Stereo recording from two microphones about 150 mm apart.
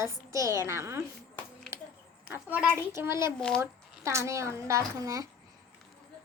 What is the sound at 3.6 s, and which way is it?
A woman's voice, 20° right (ahead or behind).